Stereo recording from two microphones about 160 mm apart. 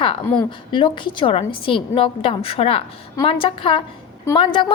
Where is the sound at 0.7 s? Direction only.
30° left (ahead or behind).